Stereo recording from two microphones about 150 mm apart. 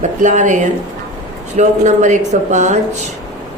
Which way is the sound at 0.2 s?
55° right (ahead or behind).